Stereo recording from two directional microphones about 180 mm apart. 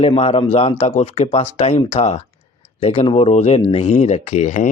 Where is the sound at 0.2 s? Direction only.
30° left (ahead or behind).